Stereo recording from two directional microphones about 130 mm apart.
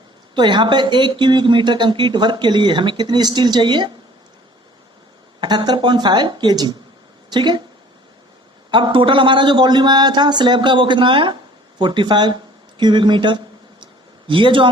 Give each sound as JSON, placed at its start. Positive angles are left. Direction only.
{"t": 0.3, "sound": "speech", "side_deg": -35}
{"t": 5.4, "sound": "speech", "side_deg": -35}
{"t": 8.7, "sound": "speech", "side_deg": -40}